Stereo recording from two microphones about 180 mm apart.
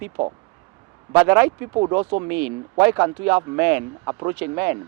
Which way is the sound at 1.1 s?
10° right (ahead or behind).